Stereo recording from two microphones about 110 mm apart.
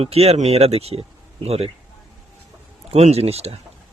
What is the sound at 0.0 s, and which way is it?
Speech, 65° right (ahead or behind).